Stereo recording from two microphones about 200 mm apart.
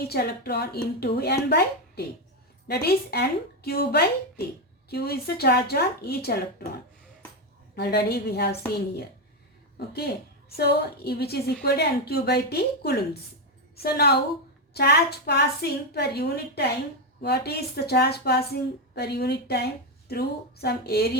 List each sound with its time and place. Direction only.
0.1 s a woman's voice: 50° left (ahead or behind)
7.8 s a woman's voice: 55° left (ahead or behind)